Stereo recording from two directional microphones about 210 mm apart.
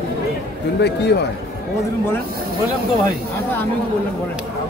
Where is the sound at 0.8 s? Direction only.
55° left (ahead or behind).